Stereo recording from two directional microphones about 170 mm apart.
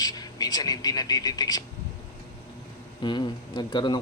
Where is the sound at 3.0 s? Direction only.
25° left (ahead or behind).